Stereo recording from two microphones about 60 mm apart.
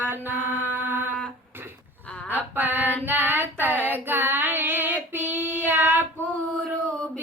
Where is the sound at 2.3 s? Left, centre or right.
Right.